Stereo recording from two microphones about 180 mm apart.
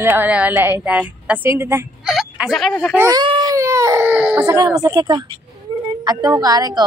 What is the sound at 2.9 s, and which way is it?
Baby cry, 15° right (ahead or behind).